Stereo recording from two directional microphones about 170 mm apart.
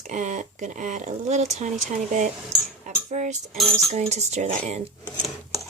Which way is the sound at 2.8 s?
45° right (ahead or behind).